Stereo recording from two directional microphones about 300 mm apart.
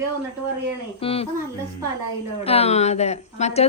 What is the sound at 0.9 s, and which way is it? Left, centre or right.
Speech, centre.